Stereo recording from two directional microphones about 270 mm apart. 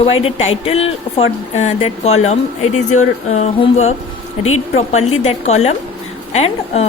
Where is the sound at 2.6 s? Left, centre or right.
Left.